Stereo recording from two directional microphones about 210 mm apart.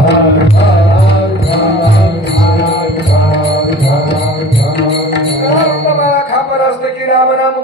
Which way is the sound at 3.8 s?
50° left (ahead or behind).